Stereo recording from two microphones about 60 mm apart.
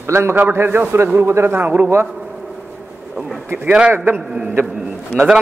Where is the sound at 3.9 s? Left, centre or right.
Right.